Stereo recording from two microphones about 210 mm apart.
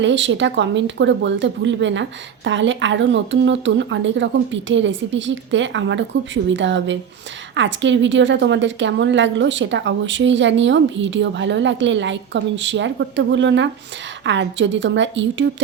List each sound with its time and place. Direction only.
0.0 s speech: 60° right (ahead or behind)